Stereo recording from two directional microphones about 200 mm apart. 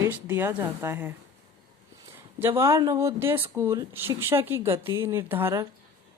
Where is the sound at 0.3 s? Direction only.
10° right (ahead or behind).